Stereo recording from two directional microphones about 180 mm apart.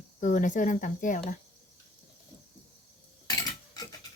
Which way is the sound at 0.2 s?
45° left (ahead or behind).